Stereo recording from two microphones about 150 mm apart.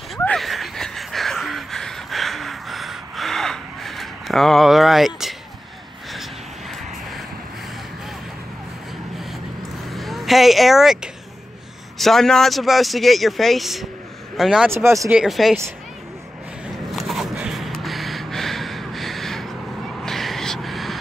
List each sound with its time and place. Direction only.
0.2 s a sound: 5° left (ahead or behind)
6.7 s vehicle: centre (ahead or behind)
9.8 s vehicle: centre (ahead or behind)
12.0 s speech: centre (ahead or behind)
14.7 s speech: 15° right (ahead or behind)
15.1 s speech: centre (ahead or behind)
16.9 s a sound: centre (ahead or behind)